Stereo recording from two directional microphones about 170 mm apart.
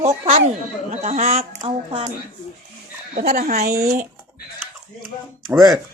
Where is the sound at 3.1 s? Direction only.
65° right (ahead or behind).